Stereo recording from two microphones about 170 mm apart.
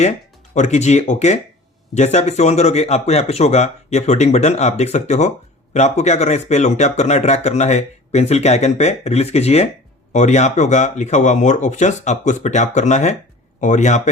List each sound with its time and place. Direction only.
0.5 s speech: 45° left (ahead or behind)